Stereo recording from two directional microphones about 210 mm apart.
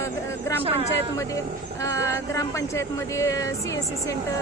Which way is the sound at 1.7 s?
15° left (ahead or behind).